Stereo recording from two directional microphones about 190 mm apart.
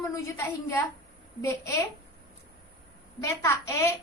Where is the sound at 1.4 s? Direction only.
15° left (ahead or behind).